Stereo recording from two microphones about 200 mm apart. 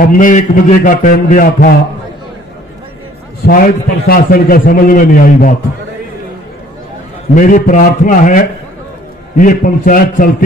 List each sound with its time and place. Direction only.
0.0 s a man's voice: 40° left (ahead or behind)
3.4 s a man's voice: 45° left (ahead or behind)
7.3 s a man's voice: 40° left (ahead or behind)